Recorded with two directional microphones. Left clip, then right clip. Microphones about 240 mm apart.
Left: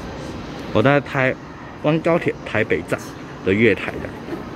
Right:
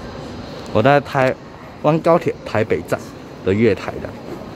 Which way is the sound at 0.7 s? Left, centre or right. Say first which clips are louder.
Right 3 dB; centre.